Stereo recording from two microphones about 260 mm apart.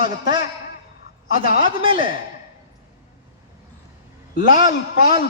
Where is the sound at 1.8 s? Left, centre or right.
Centre.